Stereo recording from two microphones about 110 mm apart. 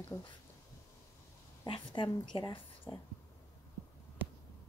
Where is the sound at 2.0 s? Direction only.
50° left (ahead or behind).